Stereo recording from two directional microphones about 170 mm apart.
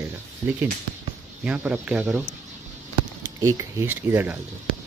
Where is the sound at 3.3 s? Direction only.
20° right (ahead or behind).